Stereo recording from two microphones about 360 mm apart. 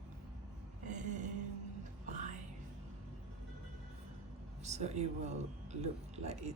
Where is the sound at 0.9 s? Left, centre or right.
Centre.